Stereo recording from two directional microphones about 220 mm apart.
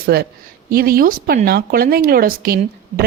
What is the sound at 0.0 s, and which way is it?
A woman's voice, 45° right (ahead or behind).